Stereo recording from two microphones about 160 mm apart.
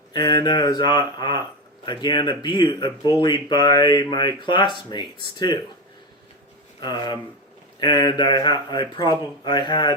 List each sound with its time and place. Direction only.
0.1 s a man's voice: 25° left (ahead or behind)
6.7 s a man's voice: 25° left (ahead or behind)